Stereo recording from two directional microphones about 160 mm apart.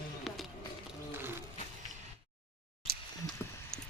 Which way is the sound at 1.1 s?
15° right (ahead or behind).